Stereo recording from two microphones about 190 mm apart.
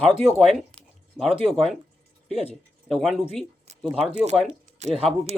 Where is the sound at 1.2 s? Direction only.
5° left (ahead or behind).